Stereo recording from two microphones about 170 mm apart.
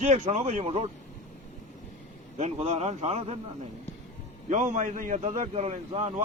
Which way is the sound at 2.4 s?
40° right (ahead or behind).